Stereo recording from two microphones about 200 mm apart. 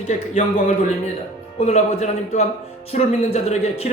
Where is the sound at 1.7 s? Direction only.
35° left (ahead or behind).